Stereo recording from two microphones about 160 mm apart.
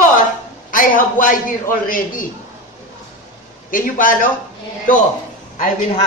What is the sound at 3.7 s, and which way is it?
Speech, 60° left (ahead or behind).